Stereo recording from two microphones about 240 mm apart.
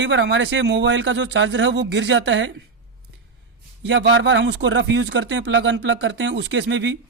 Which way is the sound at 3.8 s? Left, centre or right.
Right.